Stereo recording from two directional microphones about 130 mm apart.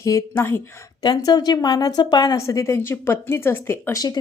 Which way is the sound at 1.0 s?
30° left (ahead or behind).